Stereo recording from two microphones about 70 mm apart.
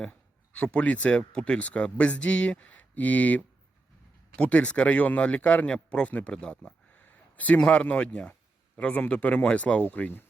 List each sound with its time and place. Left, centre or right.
0.0 s speech: centre
6.9 s speech: left